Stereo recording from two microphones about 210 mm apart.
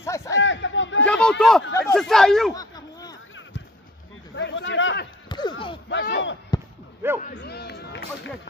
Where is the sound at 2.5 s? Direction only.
20° left (ahead or behind).